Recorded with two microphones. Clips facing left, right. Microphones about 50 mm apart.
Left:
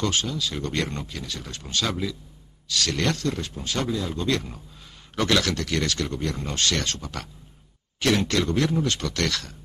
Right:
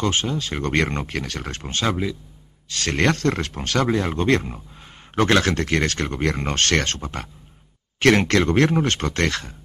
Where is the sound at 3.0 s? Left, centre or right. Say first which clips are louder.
Right 10 dB; right.